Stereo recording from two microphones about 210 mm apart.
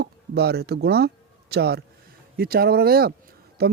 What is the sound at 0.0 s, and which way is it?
Speech, 50° right (ahead or behind).